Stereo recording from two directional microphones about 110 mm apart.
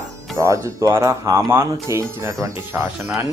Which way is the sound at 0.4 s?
30° right (ahead or behind).